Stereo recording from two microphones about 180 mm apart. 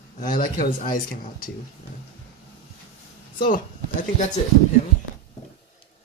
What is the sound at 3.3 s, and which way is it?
Speech, 50° left (ahead or behind).